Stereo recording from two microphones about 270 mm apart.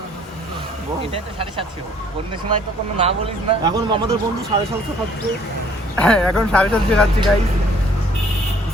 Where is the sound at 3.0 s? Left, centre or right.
Centre.